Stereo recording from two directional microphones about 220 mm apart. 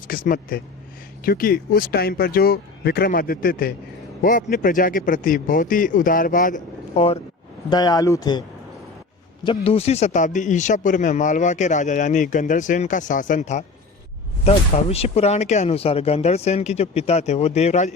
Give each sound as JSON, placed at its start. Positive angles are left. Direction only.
{"t": 0.1, "sound": "a man's voice", "side_deg": 40}